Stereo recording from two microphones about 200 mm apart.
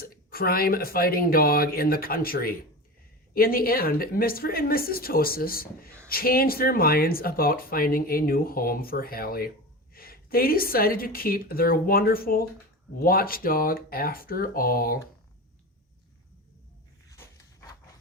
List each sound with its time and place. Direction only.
0.0 s speech: 50° left (ahead or behind)
17.1 s walk: 15° left (ahead or behind)